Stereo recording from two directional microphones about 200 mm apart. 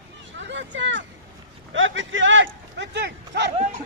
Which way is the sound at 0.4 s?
65° right (ahead or behind).